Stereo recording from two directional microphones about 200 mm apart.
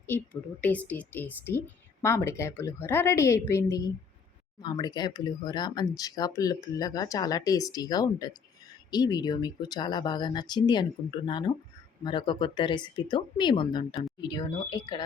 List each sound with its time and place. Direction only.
0.1 s speech: 10° left (ahead or behind)